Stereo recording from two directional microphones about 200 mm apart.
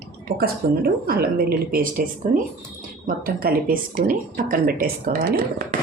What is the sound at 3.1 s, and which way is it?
Speech, 45° right (ahead or behind).